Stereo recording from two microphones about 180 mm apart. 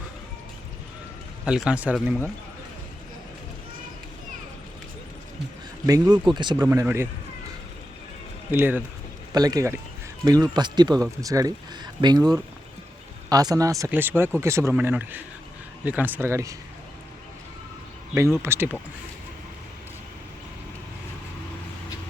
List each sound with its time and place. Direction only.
1.5 s speech: 5° right (ahead or behind)
5.8 s a man's voice: 20° right (ahead or behind)
6.7 s speech: 15° right (ahead or behind)
8.4 s speech: 10° right (ahead or behind)
9.3 s a man's voice: 20° right (ahead or behind)
18.1 s speech: 15° right (ahead or behind)